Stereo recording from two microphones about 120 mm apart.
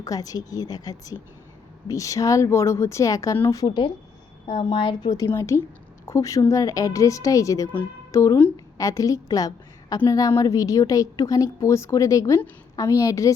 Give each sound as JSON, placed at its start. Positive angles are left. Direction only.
{"t": 0.0, "sound": "speech", "side_deg": 30}
{"t": 3.7, "sound": "a woman's voice", "side_deg": 40}
{"t": 5.1, "sound": "speech", "side_deg": 25}
{"t": 7.7, "sound": "a woman's voice", "side_deg": 15}
{"t": 8.8, "sound": "speech", "side_deg": 30}